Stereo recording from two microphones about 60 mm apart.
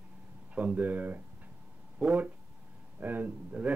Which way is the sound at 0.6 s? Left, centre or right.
Right.